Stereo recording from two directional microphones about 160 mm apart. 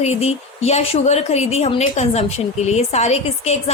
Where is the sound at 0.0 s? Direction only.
40° left (ahead or behind).